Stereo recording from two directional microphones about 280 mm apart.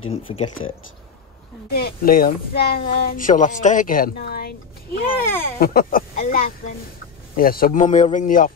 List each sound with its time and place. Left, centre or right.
0.3 s speech: centre
1.7 s a man's voice: left